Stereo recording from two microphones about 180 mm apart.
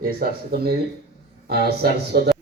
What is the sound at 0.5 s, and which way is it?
Speech, 60° right (ahead or behind).